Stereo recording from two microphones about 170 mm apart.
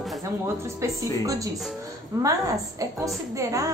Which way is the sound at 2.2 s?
20° right (ahead or behind).